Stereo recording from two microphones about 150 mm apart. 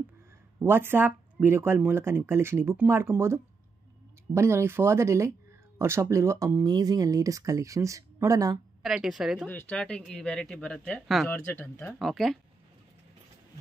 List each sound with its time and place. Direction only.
0.6 s speech: 15° right (ahead or behind)
8.8 s speech: centre (ahead or behind)
9.5 s speech: 10° left (ahead or behind)
11.2 s speech: 10° left (ahead or behind)
11.8 s speech: centre (ahead or behind)